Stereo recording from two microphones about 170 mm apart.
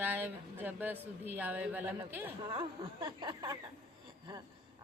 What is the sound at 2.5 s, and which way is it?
Speech, 25° right (ahead or behind).